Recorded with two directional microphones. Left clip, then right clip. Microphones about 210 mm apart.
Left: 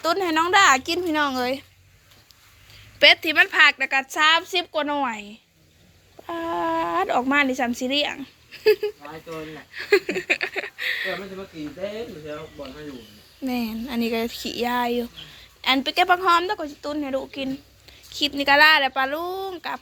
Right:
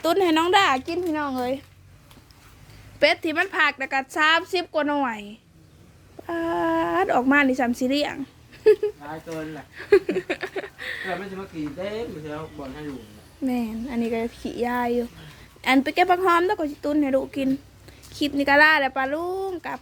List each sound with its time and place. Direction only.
0.0 s a woman's voice: 20° right (ahead or behind)
0.9 s speech: 10° left (ahead or behind)
3.0 s a woman's voice: 10° right (ahead or behind)
13.4 s speech: 10° right (ahead or behind)
15.6 s a woman's voice: 20° right (ahead or behind)